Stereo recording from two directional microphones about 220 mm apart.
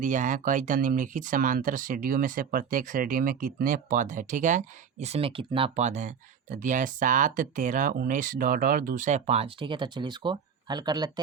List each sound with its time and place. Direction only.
0.0 s speech: 35° right (ahead or behind); by 11.1 s 20° right (ahead or behind)